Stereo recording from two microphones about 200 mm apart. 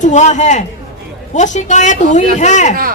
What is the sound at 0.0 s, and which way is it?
A man's voice, 35° left (ahead or behind).